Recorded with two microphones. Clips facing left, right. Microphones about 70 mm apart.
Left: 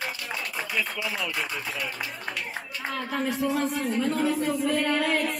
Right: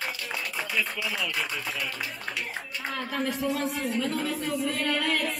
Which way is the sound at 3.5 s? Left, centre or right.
Left.